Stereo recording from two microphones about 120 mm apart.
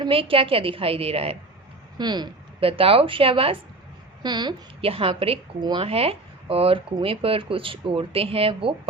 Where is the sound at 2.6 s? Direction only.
50° right (ahead or behind).